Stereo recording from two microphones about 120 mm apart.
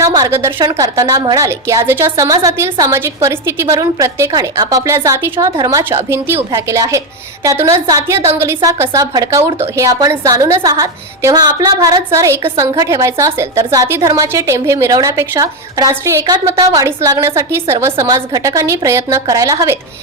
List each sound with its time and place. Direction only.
0.0 s a sound: 30° right (ahead or behind)
0.6 s a woman's voice: 30° right (ahead or behind)
1.5 s a woman's voice: 20° right (ahead or behind)